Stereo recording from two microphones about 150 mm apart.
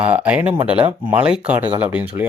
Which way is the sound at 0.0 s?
10° right (ahead or behind).